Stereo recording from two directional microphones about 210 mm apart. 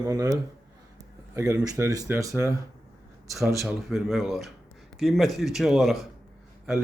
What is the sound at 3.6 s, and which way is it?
Speech, centre (ahead or behind).